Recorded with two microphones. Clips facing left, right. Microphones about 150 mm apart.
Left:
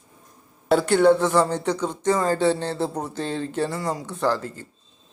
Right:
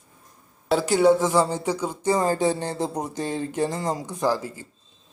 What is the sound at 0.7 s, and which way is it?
Speech, 5° right (ahead or behind).